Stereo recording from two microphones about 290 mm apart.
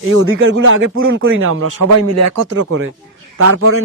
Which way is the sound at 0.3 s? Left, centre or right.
Right.